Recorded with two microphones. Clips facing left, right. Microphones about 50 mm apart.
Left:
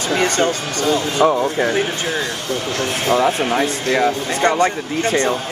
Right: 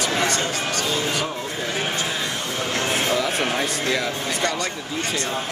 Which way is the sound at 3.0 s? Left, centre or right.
Left.